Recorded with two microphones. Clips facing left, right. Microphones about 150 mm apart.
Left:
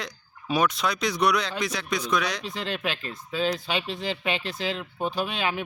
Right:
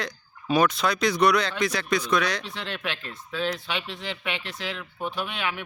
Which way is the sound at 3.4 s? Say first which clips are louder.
Left 3 dB; 35° left (ahead or behind).